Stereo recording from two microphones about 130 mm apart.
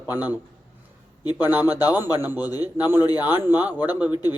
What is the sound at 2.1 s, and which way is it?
Speech, 15° right (ahead or behind).